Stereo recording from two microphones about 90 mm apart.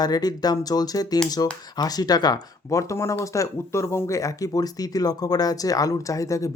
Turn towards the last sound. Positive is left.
turn(degrees=35)  # may be behind; listen again after turning